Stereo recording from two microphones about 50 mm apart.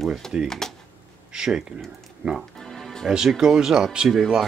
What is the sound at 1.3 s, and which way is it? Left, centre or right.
Speech, centre.